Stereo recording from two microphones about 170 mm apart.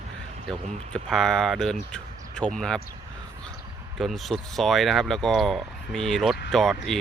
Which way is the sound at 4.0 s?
Centre (ahead or behind).